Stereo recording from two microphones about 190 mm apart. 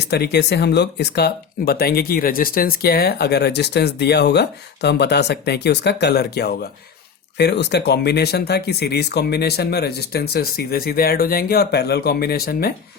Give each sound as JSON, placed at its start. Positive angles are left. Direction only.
{"t": 0.0, "sound": "speech", "side_deg": 60}